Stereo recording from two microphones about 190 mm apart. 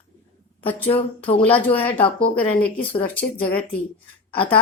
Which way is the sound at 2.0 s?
30° left (ahead or behind).